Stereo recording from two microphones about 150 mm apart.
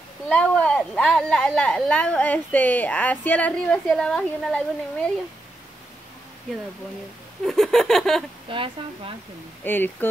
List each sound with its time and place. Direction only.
0.3 s a woman's voice: 10° left (ahead or behind)
7.4 s a sound: centre (ahead or behind)
8.5 s speech: 35° right (ahead or behind)
9.7 s a woman's voice: 15° left (ahead or behind)